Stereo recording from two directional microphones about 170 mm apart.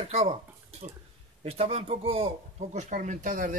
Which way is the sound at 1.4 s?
35° right (ahead or behind).